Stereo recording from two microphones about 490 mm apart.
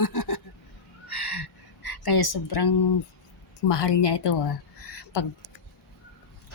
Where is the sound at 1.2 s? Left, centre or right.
Left.